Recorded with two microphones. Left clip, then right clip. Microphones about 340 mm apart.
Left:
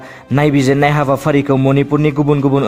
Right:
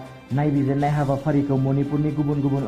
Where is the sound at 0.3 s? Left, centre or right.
Left.